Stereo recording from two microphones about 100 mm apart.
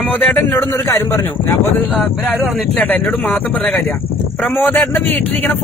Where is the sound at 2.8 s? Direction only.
15° left (ahead or behind).